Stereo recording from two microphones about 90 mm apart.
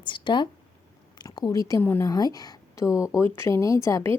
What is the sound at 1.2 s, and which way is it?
Speech, 50° left (ahead or behind).